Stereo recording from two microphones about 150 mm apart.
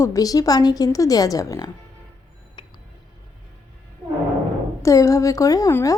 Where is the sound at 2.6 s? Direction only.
30° left (ahead or behind).